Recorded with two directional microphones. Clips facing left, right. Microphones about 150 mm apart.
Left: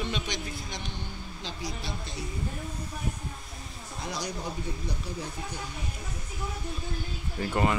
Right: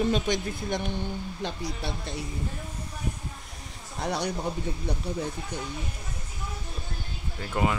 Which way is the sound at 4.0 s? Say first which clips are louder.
Right 6 dB; 65° right (ahead or behind).